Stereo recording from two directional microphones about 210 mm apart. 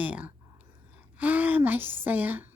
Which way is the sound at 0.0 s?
5° right (ahead or behind).